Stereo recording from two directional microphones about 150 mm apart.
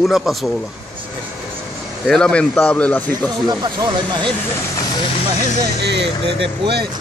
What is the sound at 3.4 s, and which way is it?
Speech, 30° right (ahead or behind).